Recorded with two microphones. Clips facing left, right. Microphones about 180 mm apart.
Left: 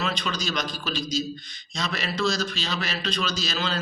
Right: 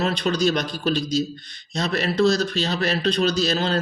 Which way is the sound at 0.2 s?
65° right (ahead or behind).